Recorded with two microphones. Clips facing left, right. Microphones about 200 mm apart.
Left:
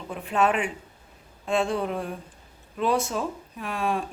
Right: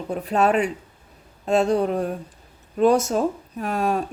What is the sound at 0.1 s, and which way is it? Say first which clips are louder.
A woman's voice: right 4 dB; 40° right (ahead or behind).